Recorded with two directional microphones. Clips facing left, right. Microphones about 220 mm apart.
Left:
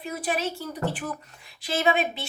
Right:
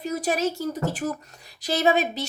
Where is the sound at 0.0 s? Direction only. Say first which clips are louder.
Right 4 dB; 40° right (ahead or behind).